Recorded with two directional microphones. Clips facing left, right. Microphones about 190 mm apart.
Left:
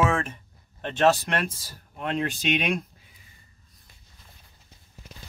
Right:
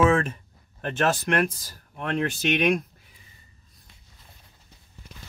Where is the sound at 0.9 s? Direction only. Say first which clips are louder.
Left 2 dB; 55° right (ahead or behind).